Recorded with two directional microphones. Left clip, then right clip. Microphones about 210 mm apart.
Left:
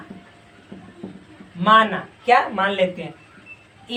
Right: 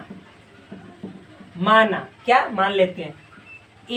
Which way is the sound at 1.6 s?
20° left (ahead or behind).